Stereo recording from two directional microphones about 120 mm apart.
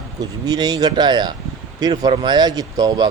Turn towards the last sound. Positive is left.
turn(degrees=-30)  # may be behind; listen again after turning